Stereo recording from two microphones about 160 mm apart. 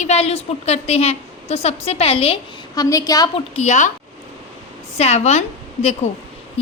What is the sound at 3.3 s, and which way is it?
Speech, 40° left (ahead or behind).